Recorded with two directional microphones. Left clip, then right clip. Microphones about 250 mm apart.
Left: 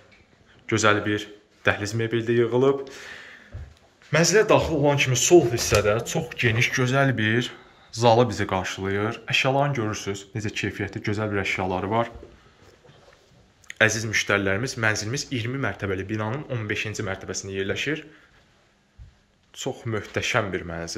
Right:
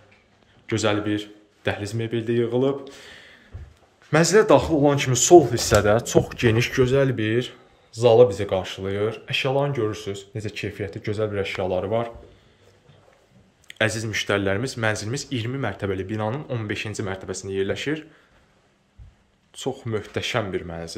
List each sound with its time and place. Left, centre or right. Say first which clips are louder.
0.7 s speech: left 2 dB; centre
13.7 s speech: left 3 dB; centre
19.5 s speech: right 2 dB; centre